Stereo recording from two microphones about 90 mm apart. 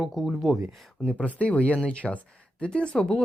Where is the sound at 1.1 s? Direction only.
15° left (ahead or behind).